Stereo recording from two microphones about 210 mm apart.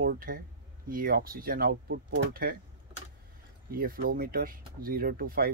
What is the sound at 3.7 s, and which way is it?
Speech, 45° right (ahead or behind).